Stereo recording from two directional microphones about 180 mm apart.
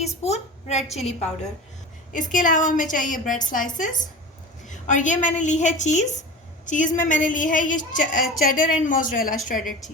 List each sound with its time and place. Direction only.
0.0 s a woman's voice: 35° left (ahead or behind)
2.1 s a woman's voice: 45° left (ahead or behind)